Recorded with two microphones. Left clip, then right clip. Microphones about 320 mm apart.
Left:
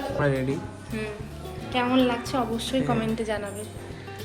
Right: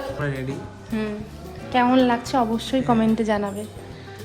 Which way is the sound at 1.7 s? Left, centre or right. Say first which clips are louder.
Right 5 dB; right.